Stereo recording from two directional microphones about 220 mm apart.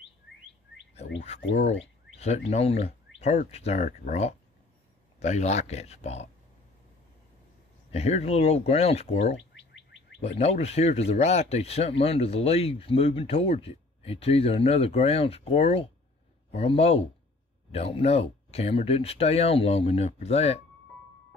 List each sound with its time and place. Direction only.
1.5 s speech: 30° left (ahead or behind)
7.9 s speech: 30° left (ahead or behind)
9.4 s chirp tone: 55° left (ahead or behind)
10.2 s speech: 30° left (ahead or behind)